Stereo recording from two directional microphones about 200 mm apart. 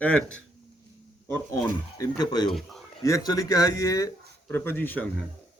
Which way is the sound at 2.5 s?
Centre (ahead or behind).